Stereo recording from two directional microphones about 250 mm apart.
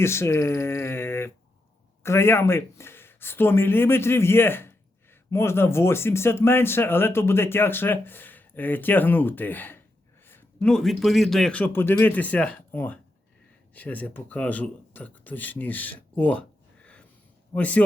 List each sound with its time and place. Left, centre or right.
0.0 s a man's voice: centre